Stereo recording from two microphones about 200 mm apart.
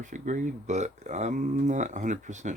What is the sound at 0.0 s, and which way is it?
Speech, 40° right (ahead or behind).